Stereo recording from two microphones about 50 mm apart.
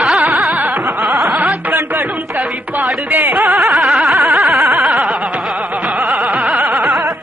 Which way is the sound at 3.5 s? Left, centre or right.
Centre.